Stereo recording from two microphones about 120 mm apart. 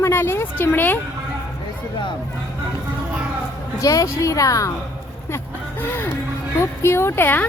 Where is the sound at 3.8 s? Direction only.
30° left (ahead or behind).